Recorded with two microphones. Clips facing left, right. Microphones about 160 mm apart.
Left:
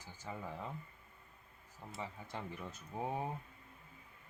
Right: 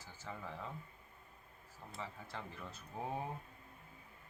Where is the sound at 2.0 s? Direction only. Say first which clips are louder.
Left 2 dB; 20° left (ahead or behind).